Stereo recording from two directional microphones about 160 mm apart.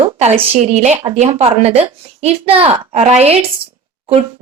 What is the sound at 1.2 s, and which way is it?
Speech, 40° right (ahead or behind).